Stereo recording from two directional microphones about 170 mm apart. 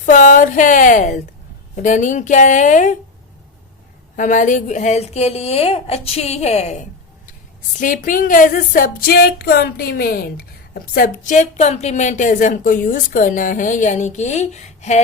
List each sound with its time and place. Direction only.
0.0 s a sound: 45° left (ahead or behind)
1.7 s music: 50° left (ahead or behind)
4.2 s a woman's voice: 50° left (ahead or behind)
7.8 s music: 50° left (ahead or behind)